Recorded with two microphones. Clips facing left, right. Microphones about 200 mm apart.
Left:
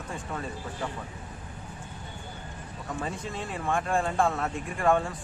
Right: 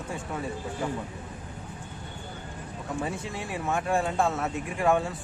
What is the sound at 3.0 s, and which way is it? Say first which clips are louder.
Speech: left 1 dB; 10° right (ahead or behind).